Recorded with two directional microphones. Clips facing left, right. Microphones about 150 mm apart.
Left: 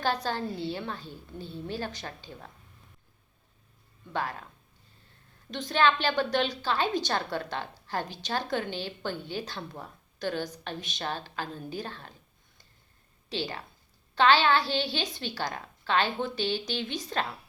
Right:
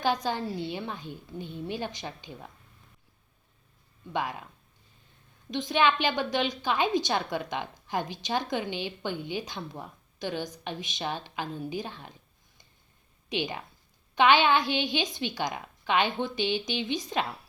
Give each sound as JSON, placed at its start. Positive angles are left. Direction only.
{"t": 0.0, "sound": "a woman's voice", "side_deg": -15}
{"t": 4.1, "sound": "a woman's voice", "side_deg": -15}
{"t": 5.5, "sound": "a woman's voice", "side_deg": -10}
{"t": 13.3, "sound": "a woman's voice", "side_deg": -15}